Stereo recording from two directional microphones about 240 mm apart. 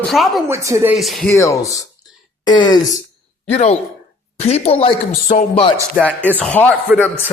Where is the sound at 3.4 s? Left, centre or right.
Left.